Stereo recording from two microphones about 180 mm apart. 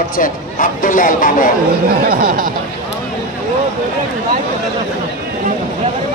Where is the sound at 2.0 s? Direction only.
50° right (ahead or behind).